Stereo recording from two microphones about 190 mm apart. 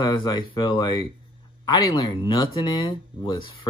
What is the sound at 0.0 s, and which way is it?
Speech, 20° left (ahead or behind).